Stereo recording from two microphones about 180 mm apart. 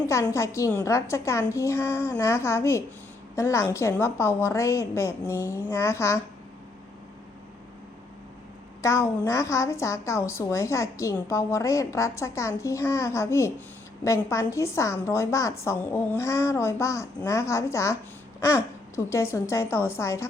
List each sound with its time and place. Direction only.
0.1 s a woman's voice: 15° left (ahead or behind)
8.8 s a woman's voice: 15° left (ahead or behind)